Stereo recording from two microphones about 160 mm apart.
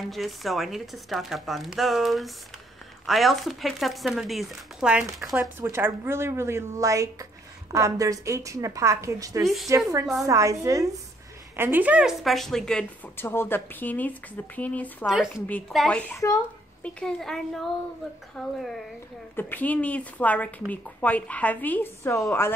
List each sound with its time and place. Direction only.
0.1 s speech: centre (ahead or behind)
5.6 s a woman's voice: 15° right (ahead or behind); by 15.0 s 10° left (ahead or behind)
15.0 s speech: 5° right (ahead or behind); by 22.2 s 15° left (ahead or behind)